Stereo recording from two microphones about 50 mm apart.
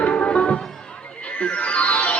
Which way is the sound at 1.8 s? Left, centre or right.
Left.